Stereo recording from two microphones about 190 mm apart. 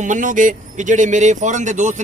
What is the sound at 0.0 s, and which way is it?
Speech, 40° right (ahead or behind).